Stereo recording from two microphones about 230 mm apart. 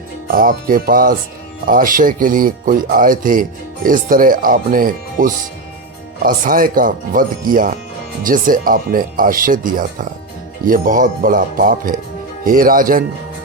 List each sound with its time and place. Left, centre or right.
0.3 s speech: right